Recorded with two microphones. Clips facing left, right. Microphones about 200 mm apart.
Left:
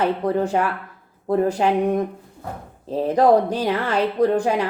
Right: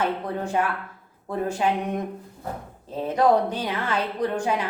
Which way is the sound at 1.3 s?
40° left (ahead or behind).